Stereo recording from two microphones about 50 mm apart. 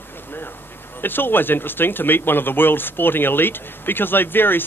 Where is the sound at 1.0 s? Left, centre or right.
Left.